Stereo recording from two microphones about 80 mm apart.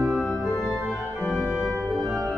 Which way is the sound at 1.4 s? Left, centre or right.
Centre.